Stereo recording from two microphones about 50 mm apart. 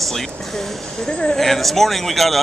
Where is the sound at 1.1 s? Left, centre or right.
Centre.